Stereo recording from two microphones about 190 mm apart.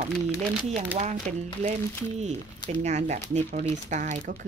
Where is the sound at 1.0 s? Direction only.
35° right (ahead or behind).